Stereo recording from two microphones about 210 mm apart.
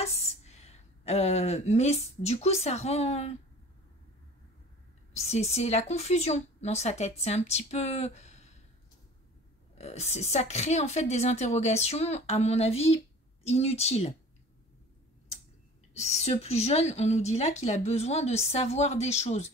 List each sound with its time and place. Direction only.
0.0 s speech: 30° left (ahead or behind)
5.1 s speech: 30° left (ahead or behind)
9.8 s speech: 30° left (ahead or behind)
16.0 s speech: 30° left (ahead or behind)